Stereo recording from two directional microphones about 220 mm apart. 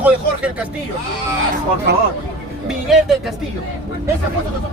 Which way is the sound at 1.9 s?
50° right (ahead or behind).